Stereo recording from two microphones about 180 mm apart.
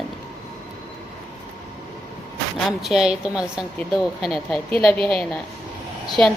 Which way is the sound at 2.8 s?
Centre (ahead or behind).